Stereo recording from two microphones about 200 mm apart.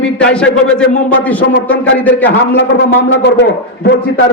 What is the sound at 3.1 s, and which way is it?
Speech, 60° left (ahead or behind).